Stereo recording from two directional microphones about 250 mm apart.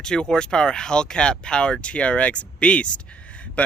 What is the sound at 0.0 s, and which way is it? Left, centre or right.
Speech, centre.